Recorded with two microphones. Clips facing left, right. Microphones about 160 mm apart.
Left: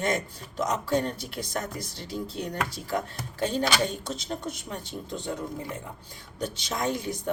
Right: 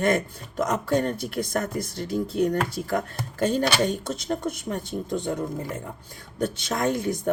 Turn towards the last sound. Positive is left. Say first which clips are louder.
# right 5 dB
turn(degrees=-50)  # may be behind; listen again after turning